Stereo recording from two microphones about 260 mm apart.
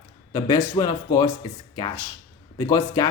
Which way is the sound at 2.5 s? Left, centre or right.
Centre.